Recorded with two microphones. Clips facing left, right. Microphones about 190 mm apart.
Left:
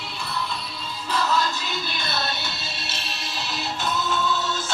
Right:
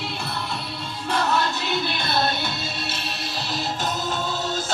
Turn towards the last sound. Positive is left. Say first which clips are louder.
# left 1 dB
turn(degrees=-45)  # may be behind; listen again after turning